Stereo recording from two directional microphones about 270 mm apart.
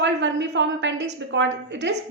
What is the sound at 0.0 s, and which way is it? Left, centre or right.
A woman's voice, right.